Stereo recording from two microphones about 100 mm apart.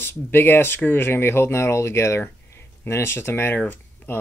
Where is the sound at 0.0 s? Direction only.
20° left (ahead or behind).